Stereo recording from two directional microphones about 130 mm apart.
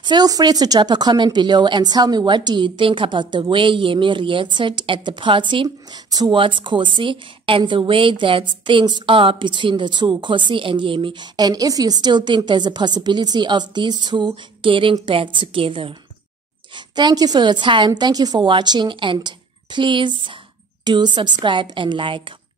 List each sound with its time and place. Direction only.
0.0 s speech: 30° right (ahead or behind)